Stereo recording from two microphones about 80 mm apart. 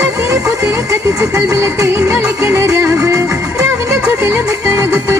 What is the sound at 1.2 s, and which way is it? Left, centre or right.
Music, right.